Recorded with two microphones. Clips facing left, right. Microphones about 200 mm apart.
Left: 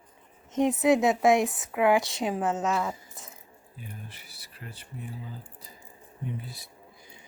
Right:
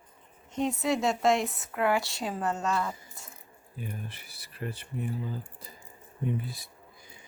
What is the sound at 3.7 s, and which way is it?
Speech, 55° right (ahead or behind).